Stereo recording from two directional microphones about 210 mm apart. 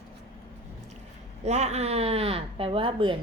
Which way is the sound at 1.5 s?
30° right (ahead or behind).